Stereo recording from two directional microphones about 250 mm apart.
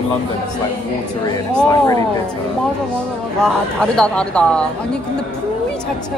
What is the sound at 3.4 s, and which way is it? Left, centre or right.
Speech, centre.